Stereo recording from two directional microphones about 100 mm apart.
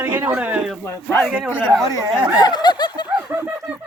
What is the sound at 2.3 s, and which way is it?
Snicker, 45° left (ahead or behind).